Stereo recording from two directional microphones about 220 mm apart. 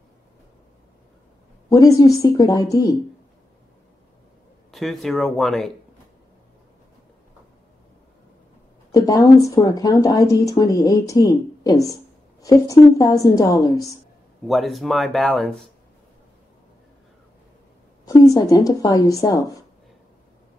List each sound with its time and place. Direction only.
1.7 s a woman's voice: 15° left (ahead or behind)
4.6 s speech: centre (ahead or behind)
8.9 s a woman's voice: 15° left (ahead or behind)
14.5 s speech: centre (ahead or behind)
18.0 s a woman's voice: 15° left (ahead or behind)